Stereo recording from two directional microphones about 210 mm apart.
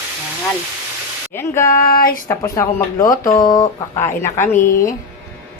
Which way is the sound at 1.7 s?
45° left (ahead or behind).